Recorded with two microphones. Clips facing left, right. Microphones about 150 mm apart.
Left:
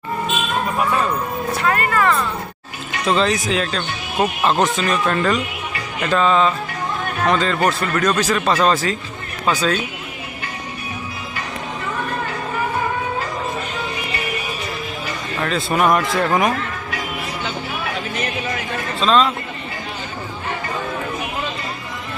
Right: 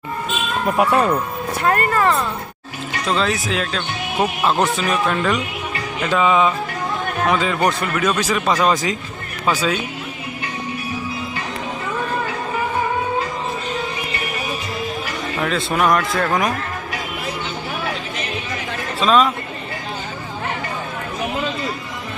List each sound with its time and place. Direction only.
0.8 s speech: 70° right (ahead or behind)
1.6 s speech: 35° right (ahead or behind)
3.1 s speech: centre (ahead or behind)
15.4 s speech: centre (ahead or behind)
18.9 s speech: 5° right (ahead or behind)